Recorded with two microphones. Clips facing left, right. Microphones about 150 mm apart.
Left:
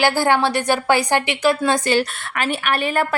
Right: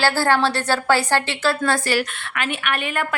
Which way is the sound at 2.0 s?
35° left (ahead or behind).